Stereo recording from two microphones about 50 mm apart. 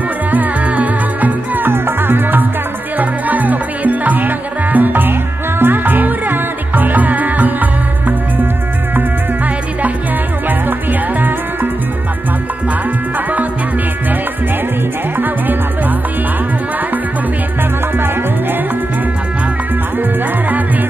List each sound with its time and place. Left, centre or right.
0.3 s music: right
1.7 s music: right
3.0 s music: right
10.7 s music: right
15.1 s music: right
17.9 s music: right
20.0 s music: right